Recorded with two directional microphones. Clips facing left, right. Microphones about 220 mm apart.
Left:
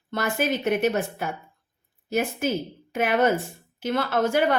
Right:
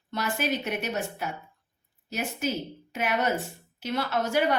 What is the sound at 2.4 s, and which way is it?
A woman's voice, 55° left (ahead or behind).